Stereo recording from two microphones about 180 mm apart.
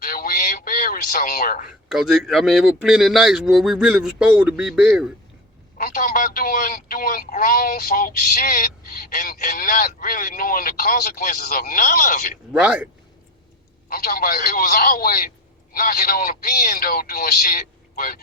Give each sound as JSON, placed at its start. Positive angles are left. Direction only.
{"t": 0.0, "sound": "a man's voice", "side_deg": 55}
{"t": 1.9, "sound": "a man's voice", "side_deg": -5}
{"t": 5.7, "sound": "a man's voice", "side_deg": 50}
{"t": 13.9, "sound": "a man's voice", "side_deg": 55}